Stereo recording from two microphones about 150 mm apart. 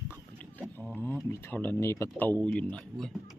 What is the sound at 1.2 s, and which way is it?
Speech, 15° left (ahead or behind).